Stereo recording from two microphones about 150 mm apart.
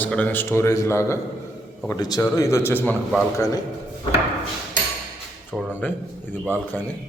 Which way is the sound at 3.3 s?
25° left (ahead or behind).